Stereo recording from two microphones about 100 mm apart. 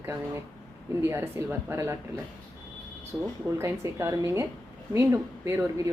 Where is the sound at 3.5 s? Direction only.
25° right (ahead or behind).